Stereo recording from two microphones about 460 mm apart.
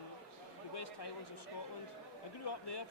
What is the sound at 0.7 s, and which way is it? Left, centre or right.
Speech, left.